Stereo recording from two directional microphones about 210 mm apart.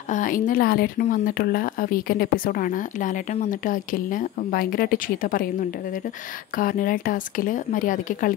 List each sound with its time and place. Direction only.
0.1 s a woman's voice: 40° left (ahead or behind)
6.5 s a woman's voice: 40° left (ahead or behind)